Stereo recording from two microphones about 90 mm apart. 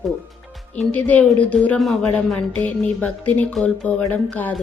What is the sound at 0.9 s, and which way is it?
Music, 20° left (ahead or behind).